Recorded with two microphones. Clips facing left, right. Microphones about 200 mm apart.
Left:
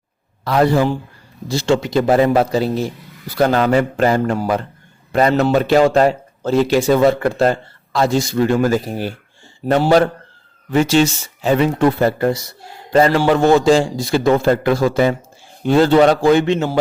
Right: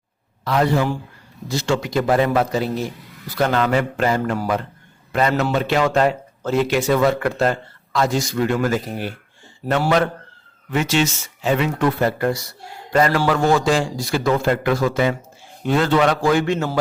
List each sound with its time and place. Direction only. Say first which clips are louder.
0.4 s a man's voice: left 4 dB; 35° left (ahead or behind); by 16.7 s 20° left (ahead or behind)